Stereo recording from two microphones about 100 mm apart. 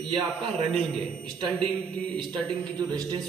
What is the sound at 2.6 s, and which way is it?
Speech, 45° right (ahead or behind).